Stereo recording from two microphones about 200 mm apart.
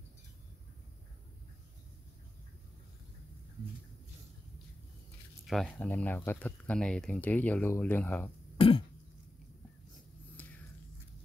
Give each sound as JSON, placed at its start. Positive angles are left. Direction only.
{"t": 5.4, "sound": "speech", "side_deg": 0}
{"t": 8.5, "sound": "throat clearing", "side_deg": 25}
{"t": 10.4, "sound": "a sound", "side_deg": 10}